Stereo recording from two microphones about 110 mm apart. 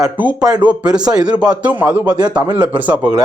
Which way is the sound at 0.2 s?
15° right (ahead or behind).